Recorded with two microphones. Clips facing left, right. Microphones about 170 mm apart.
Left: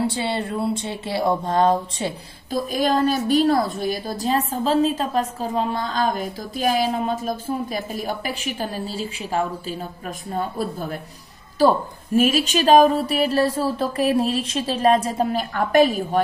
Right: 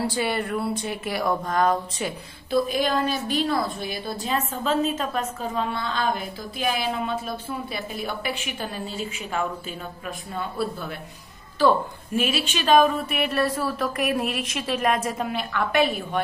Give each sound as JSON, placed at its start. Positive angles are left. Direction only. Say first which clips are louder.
{"t": 0.0, "sound": "speech", "louder": "left 2 dB", "side_deg": 25}
{"t": 2.5, "sound": "a woman's voice", "louder": "left 1 dB", "side_deg": 45}
{"t": 12.2, "sound": "a woman's voice", "louder": "left 7 dB", "side_deg": 40}